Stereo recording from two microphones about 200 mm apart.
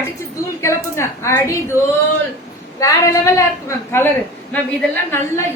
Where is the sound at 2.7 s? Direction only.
15° left (ahead or behind).